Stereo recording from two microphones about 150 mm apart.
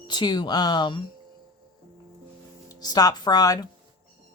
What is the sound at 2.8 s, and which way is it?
Speech, 25° left (ahead or behind).